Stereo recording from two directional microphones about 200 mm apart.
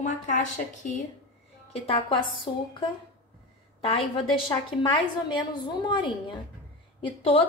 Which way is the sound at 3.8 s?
30° left (ahead or behind).